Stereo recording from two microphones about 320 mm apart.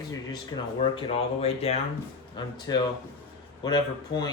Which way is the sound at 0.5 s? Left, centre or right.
Centre.